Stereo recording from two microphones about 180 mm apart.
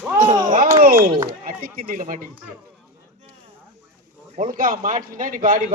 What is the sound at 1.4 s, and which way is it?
Speech, 45° right (ahead or behind).